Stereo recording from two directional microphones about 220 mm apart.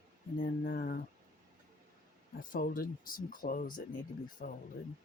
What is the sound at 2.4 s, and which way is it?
Speech, 40° left (ahead or behind).